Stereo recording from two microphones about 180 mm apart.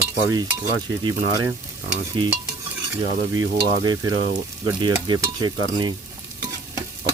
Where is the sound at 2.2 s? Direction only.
30° right (ahead or behind).